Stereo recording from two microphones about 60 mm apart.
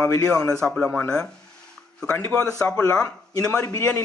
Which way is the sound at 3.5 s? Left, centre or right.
Left.